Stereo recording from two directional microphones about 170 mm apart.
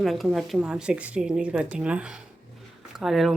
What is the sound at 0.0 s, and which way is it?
A woman's voice, centre (ahead or behind).